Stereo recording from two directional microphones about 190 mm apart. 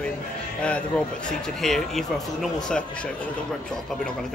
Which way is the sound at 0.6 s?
5° left (ahead or behind).